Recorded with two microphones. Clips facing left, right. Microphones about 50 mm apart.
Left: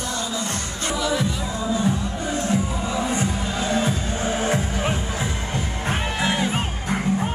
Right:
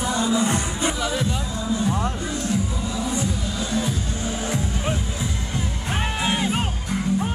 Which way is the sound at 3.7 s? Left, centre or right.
Left.